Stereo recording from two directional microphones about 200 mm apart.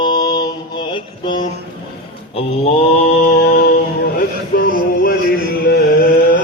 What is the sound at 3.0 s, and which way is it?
Music, 45° left (ahead or behind).